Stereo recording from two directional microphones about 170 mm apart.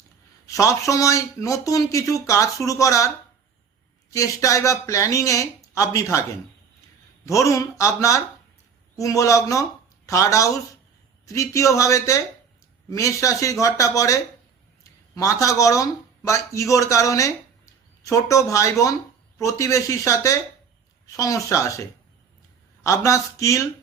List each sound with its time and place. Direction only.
0.4 s speech: 20° left (ahead or behind)
4.1 s speech: 20° left (ahead or behind)
7.3 s speech: 20° left (ahead or behind)